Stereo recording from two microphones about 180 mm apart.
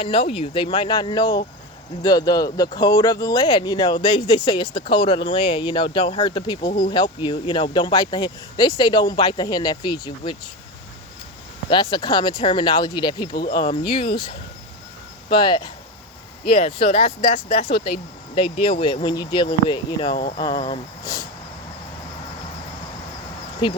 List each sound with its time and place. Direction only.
0.0 s speech: 30° left (ahead or behind)
11.7 s speech: 25° left (ahead or behind)
23.6 s speech: 25° left (ahead or behind)